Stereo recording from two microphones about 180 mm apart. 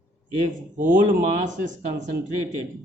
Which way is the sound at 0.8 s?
45° right (ahead or behind).